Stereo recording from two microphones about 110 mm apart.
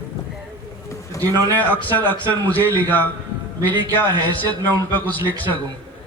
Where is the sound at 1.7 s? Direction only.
15° left (ahead or behind).